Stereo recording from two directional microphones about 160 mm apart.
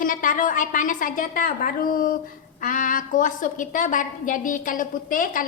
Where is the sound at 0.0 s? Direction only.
60° left (ahead or behind).